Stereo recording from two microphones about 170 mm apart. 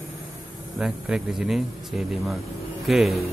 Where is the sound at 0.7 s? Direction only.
5° right (ahead or behind).